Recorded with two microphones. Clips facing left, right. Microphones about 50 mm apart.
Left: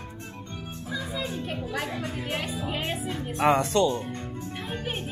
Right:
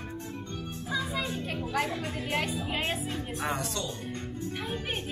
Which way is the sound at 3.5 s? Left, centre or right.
Left.